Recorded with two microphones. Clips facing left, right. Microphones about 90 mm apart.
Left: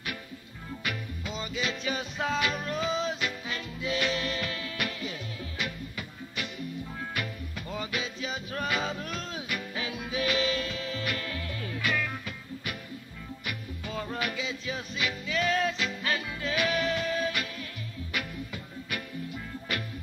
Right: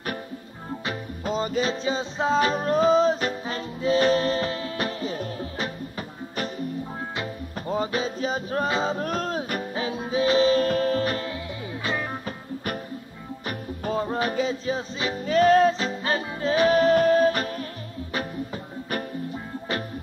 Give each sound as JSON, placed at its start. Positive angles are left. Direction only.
{"t": 0.7, "sound": "music", "side_deg": -40}
{"t": 7.5, "sound": "music", "side_deg": -35}